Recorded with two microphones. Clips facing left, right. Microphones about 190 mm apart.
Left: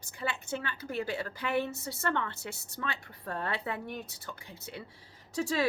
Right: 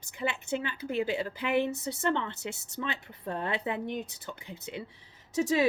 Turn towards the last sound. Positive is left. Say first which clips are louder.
# right 4 dB
turn(degrees=-20)  # may be behind; listen again after turning